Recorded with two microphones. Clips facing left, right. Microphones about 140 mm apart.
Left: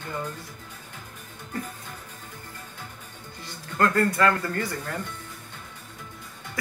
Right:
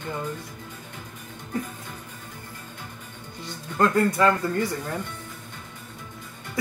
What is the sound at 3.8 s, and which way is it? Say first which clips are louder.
Speech: right 2 dB; 20° right (ahead or behind).